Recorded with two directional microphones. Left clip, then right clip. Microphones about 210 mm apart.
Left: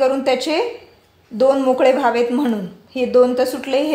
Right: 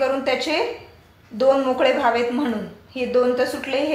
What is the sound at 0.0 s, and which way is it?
A woman's voice, 60° left (ahead or behind).